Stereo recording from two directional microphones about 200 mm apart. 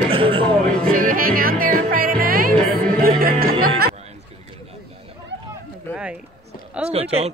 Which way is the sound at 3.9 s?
30° right (ahead or behind).